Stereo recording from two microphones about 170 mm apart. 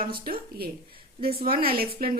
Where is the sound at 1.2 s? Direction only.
60° right (ahead or behind).